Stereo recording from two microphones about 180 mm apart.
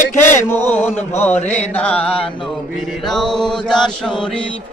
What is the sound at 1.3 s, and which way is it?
Mantra, 40° left (ahead or behind).